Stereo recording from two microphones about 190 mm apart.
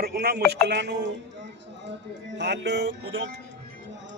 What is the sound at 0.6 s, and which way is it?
Music, 65° right (ahead or behind).